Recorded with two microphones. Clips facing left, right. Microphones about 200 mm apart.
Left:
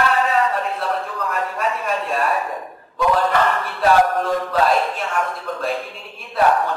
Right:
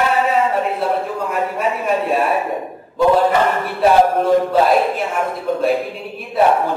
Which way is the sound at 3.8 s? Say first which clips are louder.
Right 3 dB; 20° right (ahead or behind).